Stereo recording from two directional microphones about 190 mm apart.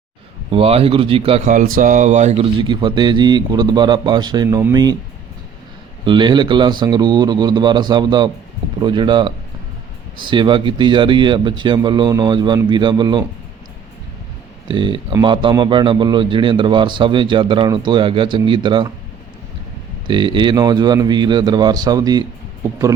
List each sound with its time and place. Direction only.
0.5 s speech: 30° right (ahead or behind)
1.7 s speech: 45° right (ahead or behind)
2.6 s speech: 25° right (ahead or behind)
6.1 s speech: 25° right (ahead or behind)
14.7 s speech: 25° right (ahead or behind)
20.1 s speech: 25° right (ahead or behind)